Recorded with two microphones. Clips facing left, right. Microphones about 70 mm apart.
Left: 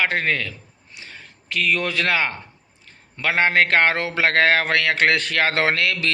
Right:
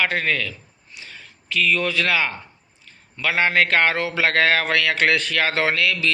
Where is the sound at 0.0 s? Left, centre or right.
Left.